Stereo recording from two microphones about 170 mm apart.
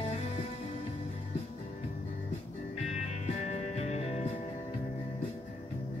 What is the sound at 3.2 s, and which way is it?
Music, 45° left (ahead or behind).